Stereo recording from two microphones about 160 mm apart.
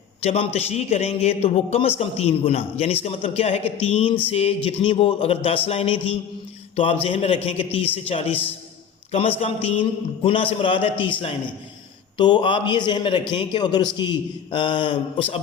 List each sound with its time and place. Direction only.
0.2 s a man's voice: 40° left (ahead or behind)
12.1 s a man's voice: 30° left (ahead or behind)